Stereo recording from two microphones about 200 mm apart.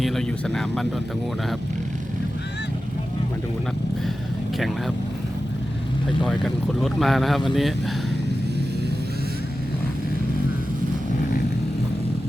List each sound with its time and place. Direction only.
0.0 s speech: centre (ahead or behind)
6.2 s speech: centre (ahead or behind)